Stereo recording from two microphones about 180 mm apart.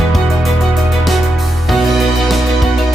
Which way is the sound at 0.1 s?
Centre (ahead or behind).